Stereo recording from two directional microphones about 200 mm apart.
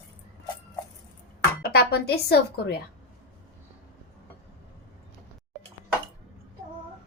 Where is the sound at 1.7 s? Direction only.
50° left (ahead or behind).